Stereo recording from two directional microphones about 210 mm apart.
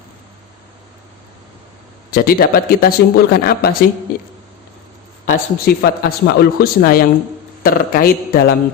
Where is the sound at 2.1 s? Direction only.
45° left (ahead or behind).